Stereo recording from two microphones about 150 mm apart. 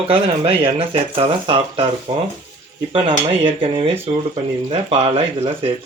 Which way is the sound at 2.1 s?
60° right (ahead or behind).